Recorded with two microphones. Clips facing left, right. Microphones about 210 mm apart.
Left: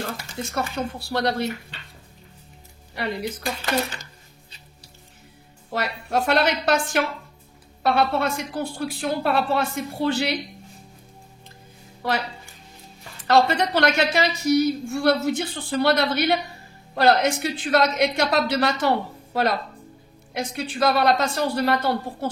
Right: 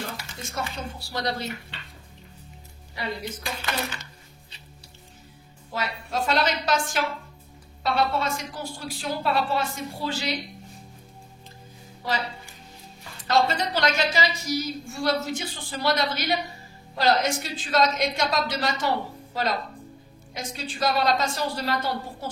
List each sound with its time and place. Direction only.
0.0 s speech: 60° left (ahead or behind)
3.0 s a woman's voice: 60° left (ahead or behind)
5.7 s a woman's voice: 65° left (ahead or behind)
13.3 s a woman's voice: 60° left (ahead or behind)